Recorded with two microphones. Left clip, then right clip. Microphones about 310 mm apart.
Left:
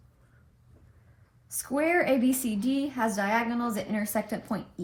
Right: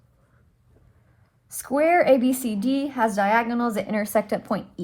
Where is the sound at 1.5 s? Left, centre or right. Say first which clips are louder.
Right 7 dB; right.